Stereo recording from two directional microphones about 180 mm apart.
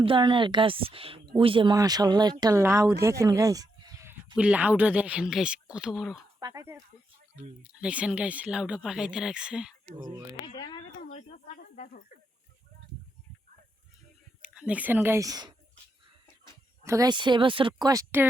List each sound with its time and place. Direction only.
0.0 s speech: 30° right (ahead or behind)
4.4 s speech: 5° right (ahead or behind)
6.4 s speech: 15° right (ahead or behind)
7.7 s speech: 5° right (ahead or behind)
10.4 s speech: 25° left (ahead or behind)
11.1 s snake: 40° left (ahead or behind)
14.4 s speech: 5° right (ahead or behind); by 15.5 s 20° right (ahead or behind)
16.8 s speech: 20° right (ahead or behind)